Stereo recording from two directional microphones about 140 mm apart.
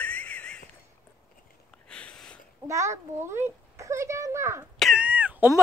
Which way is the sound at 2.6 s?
20° right (ahead or behind).